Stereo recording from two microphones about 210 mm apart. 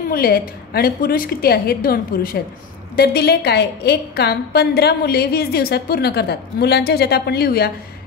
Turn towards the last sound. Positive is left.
turn(degrees=50)  # may be behind; listen again after turning